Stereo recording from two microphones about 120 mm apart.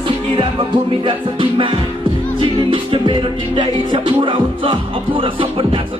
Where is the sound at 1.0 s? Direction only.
40° right (ahead or behind).